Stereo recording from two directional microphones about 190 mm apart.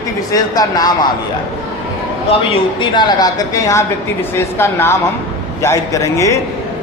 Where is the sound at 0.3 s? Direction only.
20° left (ahead or behind).